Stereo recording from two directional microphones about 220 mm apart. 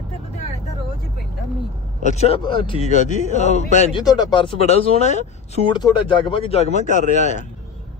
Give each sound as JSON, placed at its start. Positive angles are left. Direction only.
{"t": 2.0, "sound": "a man's voice", "side_deg": 30}
{"t": 3.9, "sound": "speech", "side_deg": 20}